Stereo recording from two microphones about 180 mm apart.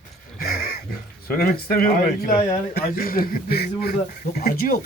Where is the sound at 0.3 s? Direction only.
55° left (ahead or behind).